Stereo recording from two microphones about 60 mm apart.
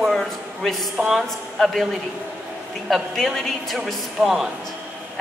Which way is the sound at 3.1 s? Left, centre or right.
Centre.